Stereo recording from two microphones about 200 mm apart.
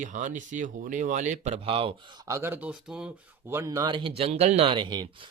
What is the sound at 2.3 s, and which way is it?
Speech, 10° right (ahead or behind).